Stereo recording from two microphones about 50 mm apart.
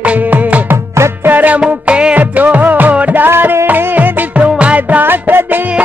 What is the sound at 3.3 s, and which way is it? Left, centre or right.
Music, right.